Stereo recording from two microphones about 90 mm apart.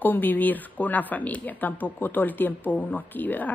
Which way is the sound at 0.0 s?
20° left (ahead or behind).